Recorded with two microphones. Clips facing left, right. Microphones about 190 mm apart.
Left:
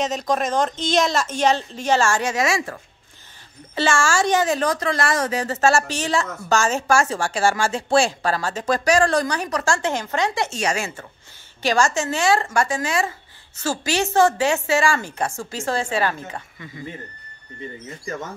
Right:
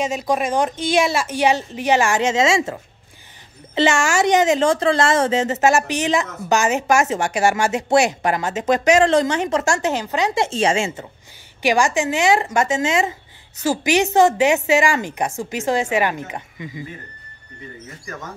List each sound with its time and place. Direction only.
0.0 s a woman's voice: 10° right (ahead or behind)